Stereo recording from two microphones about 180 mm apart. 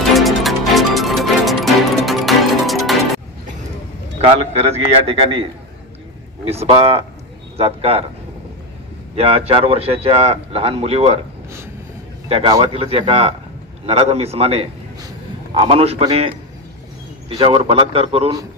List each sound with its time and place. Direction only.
0.1 s music: centre (ahead or behind)
4.2 s a man's voice: 35° right (ahead or behind)
9.1 s a man's voice: 35° right (ahead or behind)
12.3 s a man's voice: 30° right (ahead or behind)
17.4 s a man's voice: 30° right (ahead or behind)